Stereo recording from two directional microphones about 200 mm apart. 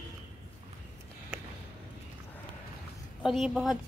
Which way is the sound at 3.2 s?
Centre (ahead or behind).